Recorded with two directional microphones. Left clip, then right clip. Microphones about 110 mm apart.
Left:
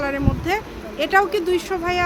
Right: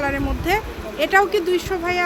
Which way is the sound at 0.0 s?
5° left (ahead or behind).